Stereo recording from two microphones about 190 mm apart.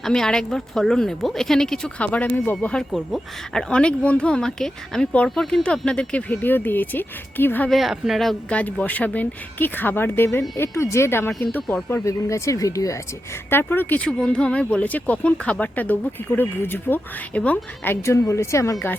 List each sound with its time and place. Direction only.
0.0 s speech: 5° left (ahead or behind)